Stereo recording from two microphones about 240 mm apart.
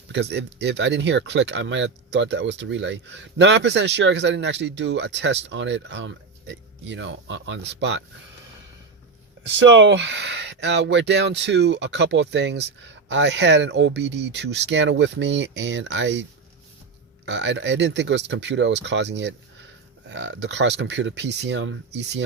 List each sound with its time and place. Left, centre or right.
0.1 s speech: right
9.5 s speech: right
17.2 s speech: right